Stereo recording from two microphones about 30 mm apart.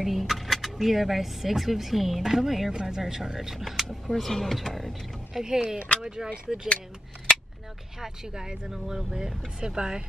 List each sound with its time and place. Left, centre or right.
0.0 s speech: centre
2.7 s speech: right
3.0 s speech: centre
4.1 s speech: centre
5.4 s speech: right
8.0 s speech: right